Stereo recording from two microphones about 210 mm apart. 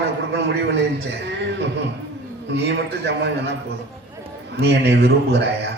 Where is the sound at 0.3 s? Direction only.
55° right (ahead or behind).